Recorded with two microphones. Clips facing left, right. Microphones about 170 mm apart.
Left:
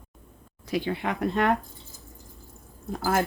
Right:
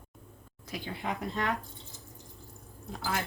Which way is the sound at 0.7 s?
80° left.